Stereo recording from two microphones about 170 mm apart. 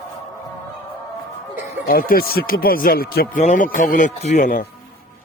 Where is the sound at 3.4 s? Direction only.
45° left (ahead or behind).